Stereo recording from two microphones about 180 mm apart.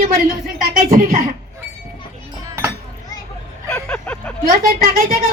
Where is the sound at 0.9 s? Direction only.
55° right (ahead or behind).